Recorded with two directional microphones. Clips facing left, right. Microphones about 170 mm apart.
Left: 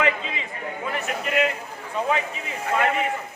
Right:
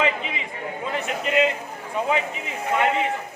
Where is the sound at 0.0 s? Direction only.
20° right (ahead or behind).